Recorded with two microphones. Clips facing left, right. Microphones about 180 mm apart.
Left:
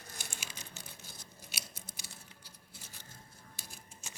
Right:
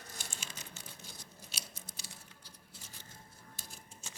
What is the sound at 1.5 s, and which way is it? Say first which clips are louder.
Scissors: left 2 dB; 10° left (ahead or behind).